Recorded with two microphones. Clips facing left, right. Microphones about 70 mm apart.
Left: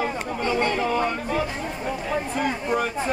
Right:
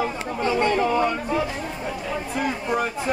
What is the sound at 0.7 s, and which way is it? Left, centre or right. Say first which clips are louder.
Speech: right 3 dB; right.